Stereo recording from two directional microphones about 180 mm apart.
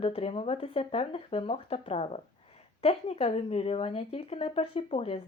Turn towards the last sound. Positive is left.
turn(degrees=30)  # may be behind; listen again after turning